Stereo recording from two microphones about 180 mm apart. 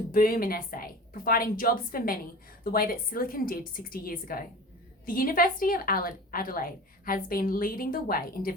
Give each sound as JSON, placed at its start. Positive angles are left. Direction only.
{"t": 0.1, "sound": "a woman's voice", "side_deg": 55}